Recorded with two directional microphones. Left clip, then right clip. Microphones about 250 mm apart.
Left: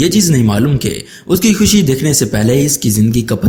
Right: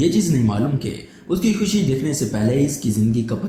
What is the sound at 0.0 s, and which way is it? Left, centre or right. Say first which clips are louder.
Speech: left 6 dB; left.